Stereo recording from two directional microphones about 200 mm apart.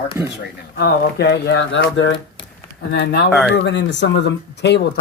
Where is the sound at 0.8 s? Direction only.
55° left (ahead or behind).